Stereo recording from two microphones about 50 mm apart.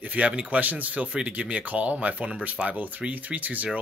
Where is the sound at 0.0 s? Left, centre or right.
Right.